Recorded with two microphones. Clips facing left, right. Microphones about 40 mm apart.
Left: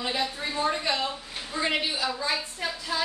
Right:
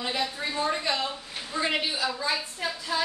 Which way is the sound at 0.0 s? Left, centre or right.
Centre.